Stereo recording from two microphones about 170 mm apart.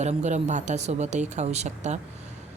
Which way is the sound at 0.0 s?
40° right (ahead or behind).